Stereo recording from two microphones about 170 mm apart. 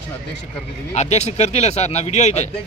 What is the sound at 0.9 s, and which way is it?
Speech, 40° left (ahead or behind).